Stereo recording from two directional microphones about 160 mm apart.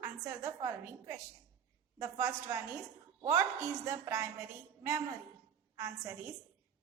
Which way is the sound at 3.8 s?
20° right (ahead or behind).